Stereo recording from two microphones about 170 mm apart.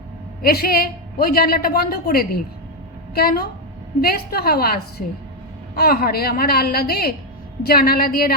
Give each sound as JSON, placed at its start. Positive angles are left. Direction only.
{"t": 0.4, "sound": "a woman's voice", "side_deg": 65}